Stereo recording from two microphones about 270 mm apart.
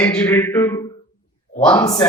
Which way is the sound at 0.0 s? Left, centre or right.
Centre.